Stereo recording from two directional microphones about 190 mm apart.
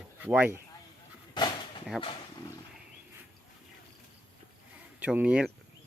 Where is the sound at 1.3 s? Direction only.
25° left (ahead or behind).